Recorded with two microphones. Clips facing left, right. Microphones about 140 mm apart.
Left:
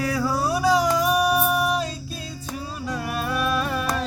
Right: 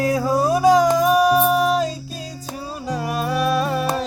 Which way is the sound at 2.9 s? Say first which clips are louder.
Right 5 dB; 35° right (ahead or behind).